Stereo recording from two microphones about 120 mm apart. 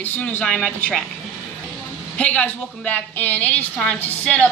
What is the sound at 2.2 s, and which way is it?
A woman's voice, 10° left (ahead or behind).